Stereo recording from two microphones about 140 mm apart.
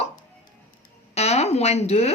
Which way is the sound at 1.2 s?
50° left (ahead or behind).